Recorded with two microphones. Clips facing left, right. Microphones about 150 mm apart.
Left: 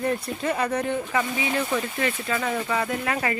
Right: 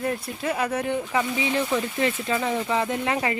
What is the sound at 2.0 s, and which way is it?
Speech, 25° right (ahead or behind).